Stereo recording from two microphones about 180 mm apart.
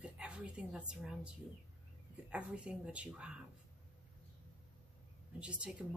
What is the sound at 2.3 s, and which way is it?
Speech, 5° right (ahead or behind).